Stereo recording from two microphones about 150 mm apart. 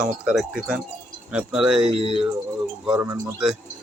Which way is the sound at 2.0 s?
40° right (ahead or behind).